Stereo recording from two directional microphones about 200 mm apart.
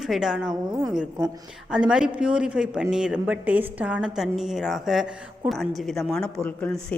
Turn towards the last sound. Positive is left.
turn(degrees=5)  # may be behind; listen again after turning